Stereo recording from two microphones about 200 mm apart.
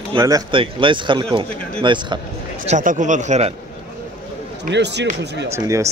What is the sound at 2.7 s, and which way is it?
Speech, 40° right (ahead or behind).